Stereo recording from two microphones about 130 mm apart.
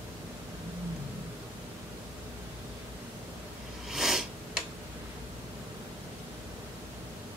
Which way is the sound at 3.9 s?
5° right (ahead or behind).